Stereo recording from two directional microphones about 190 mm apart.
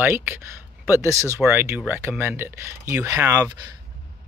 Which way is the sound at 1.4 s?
10° right (ahead or behind).